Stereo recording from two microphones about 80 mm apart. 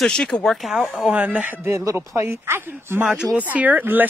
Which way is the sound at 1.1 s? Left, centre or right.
Centre.